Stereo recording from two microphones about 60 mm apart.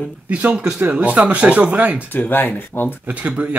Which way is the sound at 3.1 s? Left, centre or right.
Right.